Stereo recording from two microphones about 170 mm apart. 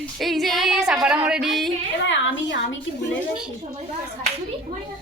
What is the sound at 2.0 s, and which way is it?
Speech, 90° left.